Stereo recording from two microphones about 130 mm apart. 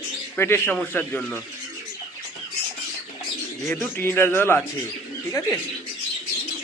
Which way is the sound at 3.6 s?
10° left (ahead or behind).